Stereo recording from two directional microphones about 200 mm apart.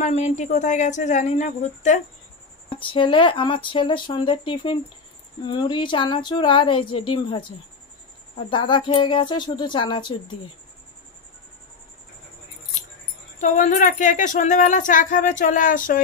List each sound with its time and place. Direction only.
0.0 s speech: 35° left (ahead or behind)
2.7 s speech: 25° left (ahead or behind)
8.5 s speech: 25° left (ahead or behind)
13.4 s speech: 40° left (ahead or behind)